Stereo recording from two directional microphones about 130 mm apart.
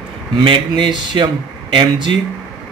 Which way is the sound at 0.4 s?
40° right (ahead or behind).